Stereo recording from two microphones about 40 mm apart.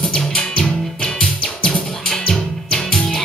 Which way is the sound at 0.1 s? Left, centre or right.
Left.